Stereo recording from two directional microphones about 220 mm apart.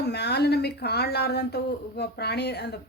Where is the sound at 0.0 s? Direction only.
50° left (ahead or behind).